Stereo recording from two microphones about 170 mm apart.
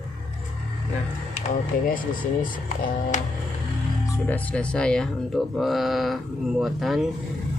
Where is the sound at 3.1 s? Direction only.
45° left (ahead or behind).